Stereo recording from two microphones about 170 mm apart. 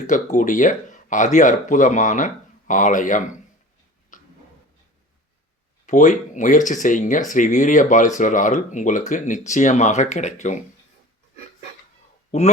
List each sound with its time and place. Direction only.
0.1 s speech: 45° left (ahead or behind)
4.1 s dog: 50° left (ahead or behind)
5.8 s speech: 45° left (ahead or behind)
12.3 s speech: 40° left (ahead or behind)